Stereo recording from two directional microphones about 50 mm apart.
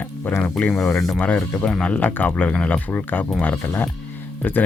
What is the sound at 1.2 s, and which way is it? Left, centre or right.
Speech, left.